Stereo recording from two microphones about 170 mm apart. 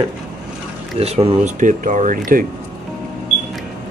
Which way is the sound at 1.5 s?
50° right (ahead or behind).